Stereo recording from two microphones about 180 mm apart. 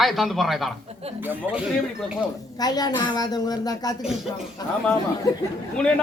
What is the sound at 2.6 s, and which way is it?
A woman's voice, 20° left (ahead or behind).